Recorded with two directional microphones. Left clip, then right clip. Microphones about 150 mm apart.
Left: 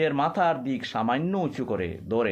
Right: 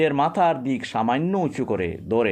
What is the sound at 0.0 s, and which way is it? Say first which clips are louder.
Speech: right 4 dB; 35° right (ahead or behind).